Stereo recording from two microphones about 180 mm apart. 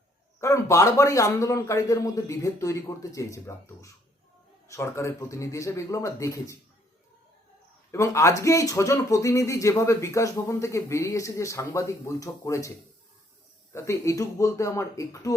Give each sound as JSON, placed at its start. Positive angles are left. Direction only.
{"t": 0.3, "sound": "speech", "side_deg": 15}
{"t": 7.9, "sound": "speech", "side_deg": 15}
{"t": 13.7, "sound": "speech", "side_deg": 15}